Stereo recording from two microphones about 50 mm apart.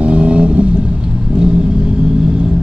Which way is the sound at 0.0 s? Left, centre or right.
Right.